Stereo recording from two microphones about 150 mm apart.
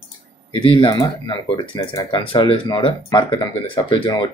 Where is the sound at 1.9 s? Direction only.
30° left (ahead or behind).